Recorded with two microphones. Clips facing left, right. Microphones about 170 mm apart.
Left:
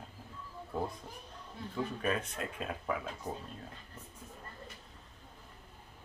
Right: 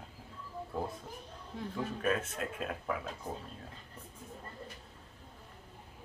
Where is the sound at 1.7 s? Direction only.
Centre (ahead or behind).